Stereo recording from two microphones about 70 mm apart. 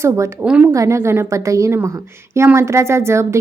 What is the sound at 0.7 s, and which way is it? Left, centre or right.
A woman's voice, right.